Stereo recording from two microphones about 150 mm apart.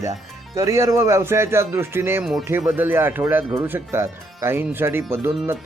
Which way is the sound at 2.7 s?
15° right (ahead or behind).